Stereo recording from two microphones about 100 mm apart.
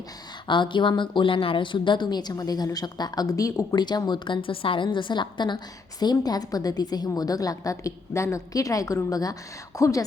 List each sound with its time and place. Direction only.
0.4 s a woman's voice: 55° left (ahead or behind); by 10.0 s 30° left (ahead or behind)